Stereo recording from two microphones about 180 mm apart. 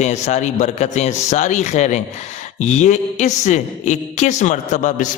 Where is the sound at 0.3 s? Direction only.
40° left (ahead or behind).